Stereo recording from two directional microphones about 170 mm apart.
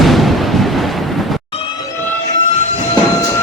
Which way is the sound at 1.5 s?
30° left (ahead or behind).